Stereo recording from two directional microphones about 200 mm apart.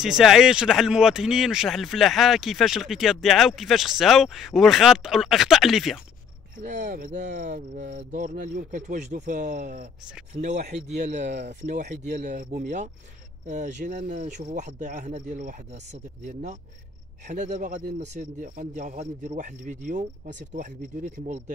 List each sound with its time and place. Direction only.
0.0 s speech: centre (ahead or behind)
6.6 s cricket: 40° right (ahead or behind)